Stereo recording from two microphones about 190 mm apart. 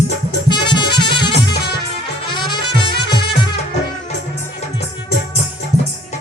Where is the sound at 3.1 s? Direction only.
60° left (ahead or behind).